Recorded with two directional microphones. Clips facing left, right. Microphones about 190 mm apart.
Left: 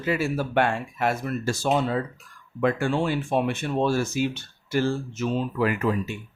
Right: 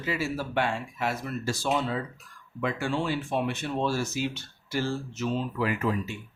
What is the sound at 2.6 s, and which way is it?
Speech, 50° left (ahead or behind).